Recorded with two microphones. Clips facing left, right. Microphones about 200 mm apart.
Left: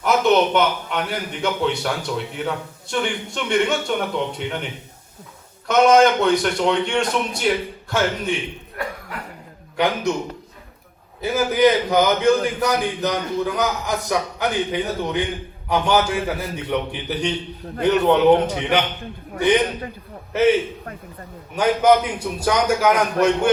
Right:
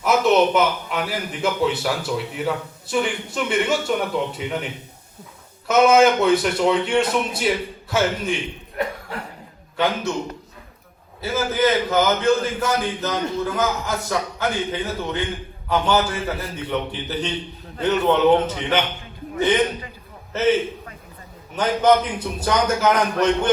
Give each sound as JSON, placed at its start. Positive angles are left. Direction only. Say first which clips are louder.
{"t": 0.0, "sound": "a man's voice", "louder": "even", "side_deg": 0}
{"t": 8.8, "sound": "cough", "louder": "right 4 dB", "side_deg": -20}
{"t": 9.7, "sound": "a man's voice", "louder": "left 2 dB", "side_deg": 15}
{"t": 11.2, "sound": "a man's voice", "louder": "left 4 dB", "side_deg": 15}
{"t": 20.3, "sound": "a man's voice", "louder": "left 2 dB", "side_deg": 15}